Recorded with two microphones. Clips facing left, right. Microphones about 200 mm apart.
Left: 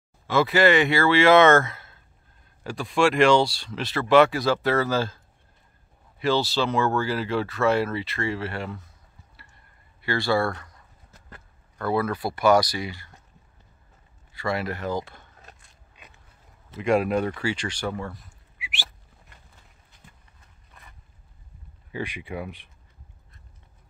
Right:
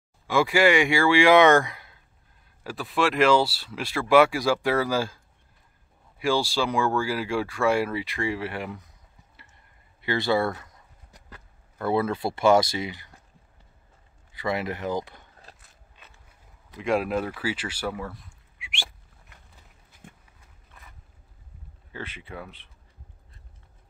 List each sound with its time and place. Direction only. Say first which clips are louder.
0.3 s speech: left 1 dB; 10° right (ahead or behind)
2.6 s speech: left 3 dB; 5° right (ahead or behind)
10.0 s speech: even; 20° right (ahead or behind)
10.5 s a sound: even; 10° right (ahead or behind)
11.8 s speech: even; 25° right (ahead or behind)
14.3 s speech: even; 20° right (ahead or behind)
16.7 s speech: left 3 dB; centre (ahead or behind)
20.2 s a sound: right 1 dB; 5° right (ahead or behind)
21.9 s speech: left 6 dB; 15° left (ahead or behind)